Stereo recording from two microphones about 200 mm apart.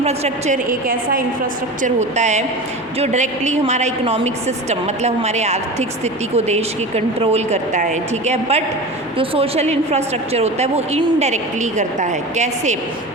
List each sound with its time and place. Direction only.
0.0 s a woman's voice: 35° right (ahead or behind)